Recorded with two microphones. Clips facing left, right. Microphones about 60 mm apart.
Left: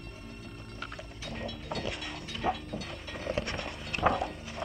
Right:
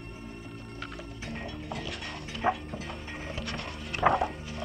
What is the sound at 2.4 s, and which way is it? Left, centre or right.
Mechanisms, right.